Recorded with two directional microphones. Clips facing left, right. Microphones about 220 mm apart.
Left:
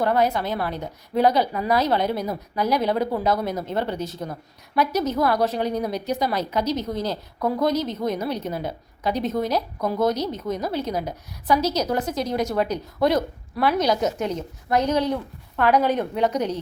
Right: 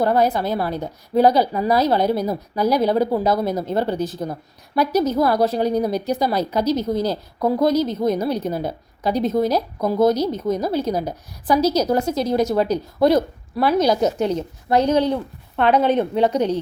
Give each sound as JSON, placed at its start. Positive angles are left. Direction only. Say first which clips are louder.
{"t": 0.0, "sound": "a woman's voice", "louder": "right 3 dB", "side_deg": -35}